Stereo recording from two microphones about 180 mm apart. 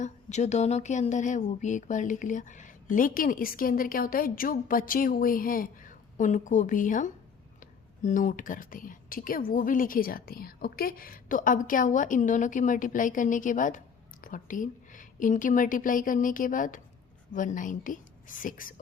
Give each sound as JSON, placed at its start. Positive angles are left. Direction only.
{"t": 0.0, "sound": "a woman's voice", "side_deg": 40}